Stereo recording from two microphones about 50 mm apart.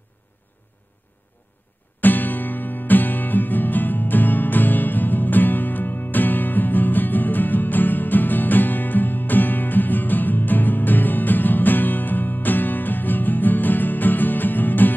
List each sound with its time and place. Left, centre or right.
2.0 s music: left